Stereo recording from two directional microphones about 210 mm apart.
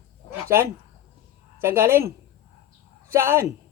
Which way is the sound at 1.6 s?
10° right (ahead or behind).